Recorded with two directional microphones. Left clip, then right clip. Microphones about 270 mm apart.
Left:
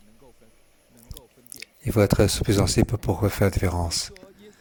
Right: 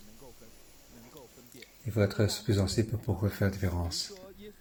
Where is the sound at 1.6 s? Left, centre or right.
Left.